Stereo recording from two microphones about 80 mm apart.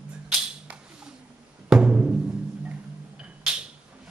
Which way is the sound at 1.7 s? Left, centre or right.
Centre.